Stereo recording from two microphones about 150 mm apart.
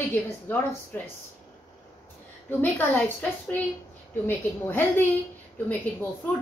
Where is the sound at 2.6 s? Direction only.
10° left (ahead or behind).